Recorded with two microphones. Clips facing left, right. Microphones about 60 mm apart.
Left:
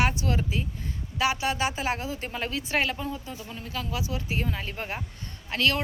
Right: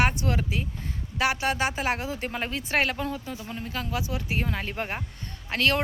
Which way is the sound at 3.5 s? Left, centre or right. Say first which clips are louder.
Right 2 dB; right.